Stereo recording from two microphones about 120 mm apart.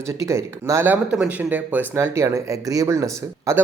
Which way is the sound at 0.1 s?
25° right (ahead or behind).